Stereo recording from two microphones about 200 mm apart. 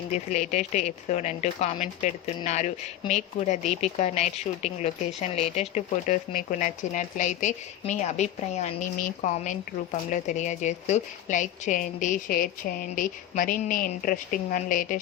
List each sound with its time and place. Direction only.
0.1 s speech: 35° left (ahead or behind)